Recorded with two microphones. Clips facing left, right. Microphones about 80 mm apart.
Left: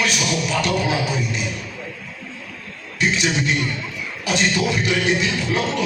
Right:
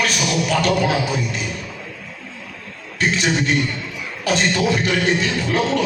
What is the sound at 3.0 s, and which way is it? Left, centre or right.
A man's voice, right.